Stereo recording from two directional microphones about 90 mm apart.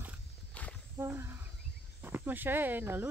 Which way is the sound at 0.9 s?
25° right (ahead or behind).